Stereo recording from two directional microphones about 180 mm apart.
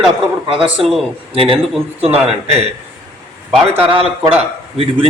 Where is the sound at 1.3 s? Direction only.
30° right (ahead or behind).